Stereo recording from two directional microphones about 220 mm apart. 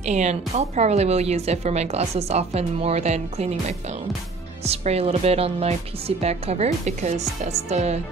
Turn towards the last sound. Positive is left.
turn(degrees=-30)  # may be behind; listen again after turning